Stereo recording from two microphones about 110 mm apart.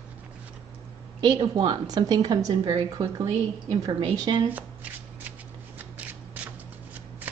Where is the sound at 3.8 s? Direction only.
40° right (ahead or behind).